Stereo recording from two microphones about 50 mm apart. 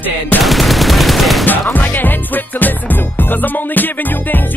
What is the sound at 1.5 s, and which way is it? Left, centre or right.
Music, left.